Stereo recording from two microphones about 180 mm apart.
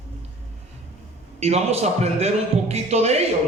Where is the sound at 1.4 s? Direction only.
35° right (ahead or behind).